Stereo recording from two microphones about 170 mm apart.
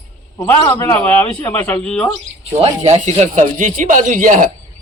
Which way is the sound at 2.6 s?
40° right (ahead or behind).